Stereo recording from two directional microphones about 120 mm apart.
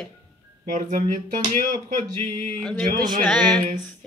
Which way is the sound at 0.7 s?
90° right.